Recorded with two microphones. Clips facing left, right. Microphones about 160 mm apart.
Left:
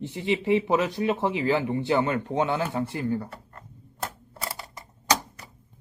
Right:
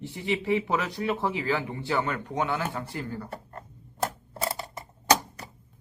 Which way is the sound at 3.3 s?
35° right (ahead or behind).